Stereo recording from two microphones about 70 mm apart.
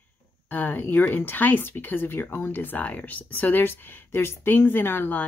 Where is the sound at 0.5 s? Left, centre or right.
Left.